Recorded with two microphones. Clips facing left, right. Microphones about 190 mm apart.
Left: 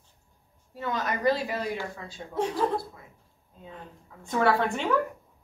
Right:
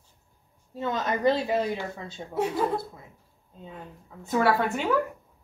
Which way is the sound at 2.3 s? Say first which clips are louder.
Right 1 dB; 10° right (ahead or behind).